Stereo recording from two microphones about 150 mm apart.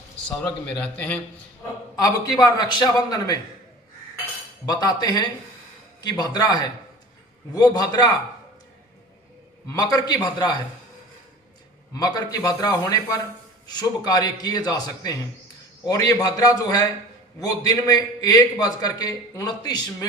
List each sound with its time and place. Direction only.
0.3 s a man's voice: 10° left (ahead or behind)
2.0 s a man's voice: 25° left (ahead or behind)
4.6 s a man's voice: 25° left (ahead or behind)
9.7 s a man's voice: 25° left (ahead or behind)
11.9 s a man's voice: 25° left (ahead or behind)